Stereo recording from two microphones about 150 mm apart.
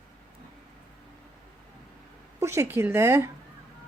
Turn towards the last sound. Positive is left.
turn(degrees=-15)  # may be behind; listen again after turning